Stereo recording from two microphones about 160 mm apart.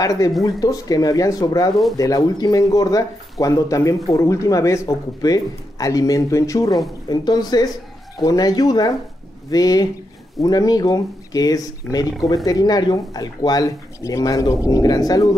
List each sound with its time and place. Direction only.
0.0 s speech: 20° left (ahead or behind)